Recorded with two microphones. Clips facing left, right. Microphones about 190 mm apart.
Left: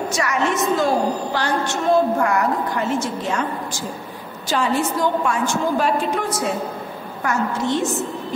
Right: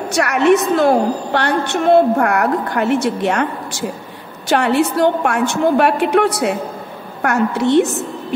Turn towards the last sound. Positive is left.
turn(degrees=-65)  # may be behind; listen again after turning